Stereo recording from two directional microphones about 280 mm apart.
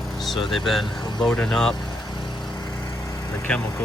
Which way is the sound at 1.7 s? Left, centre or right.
Centre.